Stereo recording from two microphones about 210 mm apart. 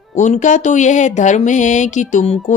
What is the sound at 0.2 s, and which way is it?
Speech, 35° left (ahead or behind).